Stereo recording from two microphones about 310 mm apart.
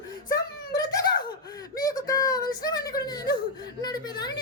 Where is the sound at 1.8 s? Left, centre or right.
Centre.